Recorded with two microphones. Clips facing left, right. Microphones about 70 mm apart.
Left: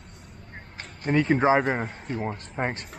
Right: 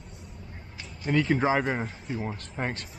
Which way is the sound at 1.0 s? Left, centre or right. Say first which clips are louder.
Left 3 dB; left.